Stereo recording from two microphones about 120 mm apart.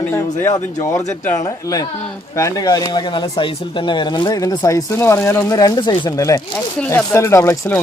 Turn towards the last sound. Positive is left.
turn(degrees=20)  # may be behind; listen again after turning